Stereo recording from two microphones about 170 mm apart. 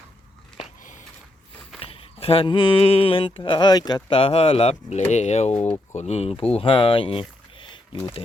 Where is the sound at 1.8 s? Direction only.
35° left (ahead or behind).